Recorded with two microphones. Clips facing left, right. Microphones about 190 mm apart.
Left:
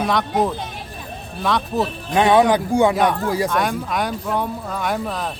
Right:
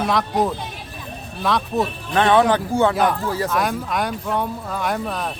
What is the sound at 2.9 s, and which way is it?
Speech, centre (ahead or behind).